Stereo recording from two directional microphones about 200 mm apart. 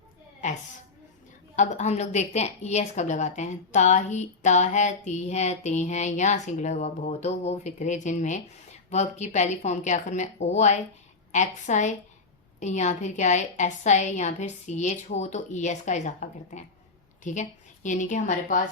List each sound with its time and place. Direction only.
1.5 s a woman's voice: 35° left (ahead or behind)